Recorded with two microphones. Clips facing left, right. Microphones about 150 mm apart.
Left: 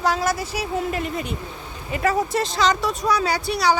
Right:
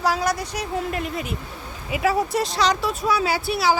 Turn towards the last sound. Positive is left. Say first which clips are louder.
# even
turn(degrees=-5)  # may be behind; listen again after turning